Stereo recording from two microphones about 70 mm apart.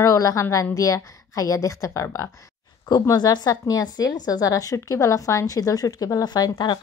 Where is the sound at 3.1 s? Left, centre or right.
Left.